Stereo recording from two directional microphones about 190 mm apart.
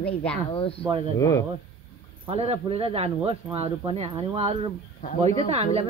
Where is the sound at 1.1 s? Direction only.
15° left (ahead or behind).